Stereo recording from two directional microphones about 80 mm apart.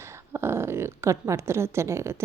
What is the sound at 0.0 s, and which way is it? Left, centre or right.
Speech, right.